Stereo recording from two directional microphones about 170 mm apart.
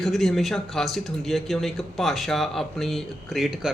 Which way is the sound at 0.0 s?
Centre (ahead or behind).